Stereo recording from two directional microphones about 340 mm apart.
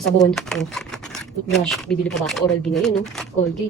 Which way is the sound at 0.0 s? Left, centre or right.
Centre.